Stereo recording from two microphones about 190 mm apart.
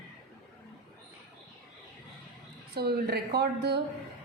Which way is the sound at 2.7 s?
55° right (ahead or behind).